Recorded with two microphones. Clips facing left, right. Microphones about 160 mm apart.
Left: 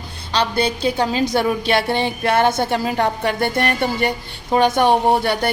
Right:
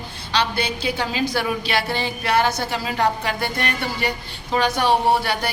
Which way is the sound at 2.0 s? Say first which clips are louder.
Left 3 dB; 55° left (ahead or behind).